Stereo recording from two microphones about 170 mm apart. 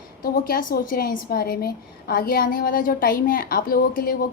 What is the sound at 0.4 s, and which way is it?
A woman's voice, 55° left (ahead or behind).